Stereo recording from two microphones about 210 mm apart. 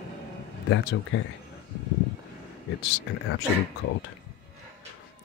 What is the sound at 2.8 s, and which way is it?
Speech, 55° left (ahead or behind).